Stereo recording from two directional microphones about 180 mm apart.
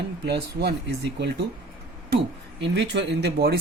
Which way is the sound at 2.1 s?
75° right (ahead or behind).